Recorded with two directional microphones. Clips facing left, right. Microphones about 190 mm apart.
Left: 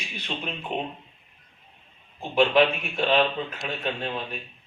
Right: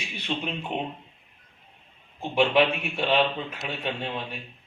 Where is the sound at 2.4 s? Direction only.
10° right (ahead or behind).